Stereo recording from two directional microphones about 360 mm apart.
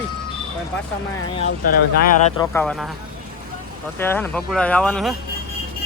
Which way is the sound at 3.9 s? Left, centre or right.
Centre.